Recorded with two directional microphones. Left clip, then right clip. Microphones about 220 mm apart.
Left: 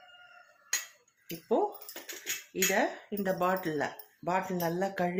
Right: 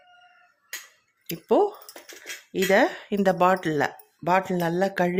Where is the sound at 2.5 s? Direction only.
55° right (ahead or behind).